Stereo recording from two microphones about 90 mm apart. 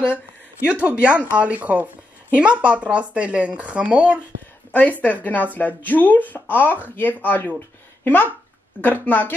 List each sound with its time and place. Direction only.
0.7 s speech: 15° right (ahead or behind)
4.7 s speech: 20° left (ahead or behind)